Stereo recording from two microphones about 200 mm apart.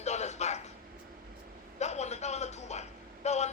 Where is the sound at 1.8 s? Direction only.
35° left (ahead or behind).